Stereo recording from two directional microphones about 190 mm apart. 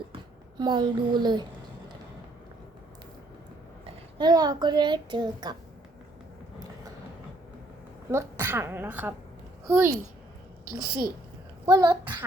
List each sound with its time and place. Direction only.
0.6 s a child's voice: 20° right (ahead or behind)
4.2 s a child's voice: 20° right (ahead or behind)
8.1 s a woman's voice: 15° right (ahead or behind)
10.7 s a child's voice: 20° right (ahead or behind)